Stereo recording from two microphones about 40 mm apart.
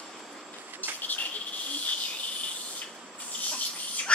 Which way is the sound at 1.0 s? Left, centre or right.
Left.